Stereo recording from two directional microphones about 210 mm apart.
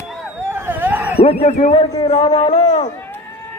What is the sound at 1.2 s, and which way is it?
A man's voice, 30° left (ahead or behind).